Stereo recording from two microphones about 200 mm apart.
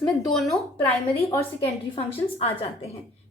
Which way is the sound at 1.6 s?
30° left (ahead or behind).